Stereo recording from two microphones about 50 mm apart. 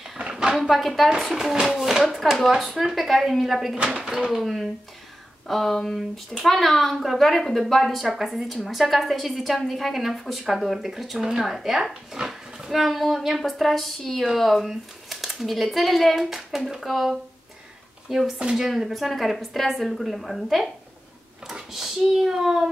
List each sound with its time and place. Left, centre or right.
0.2 s a sound: centre
0.6 s a woman's voice: centre
3.7 s speech: centre
4.3 s a woman's voice: centre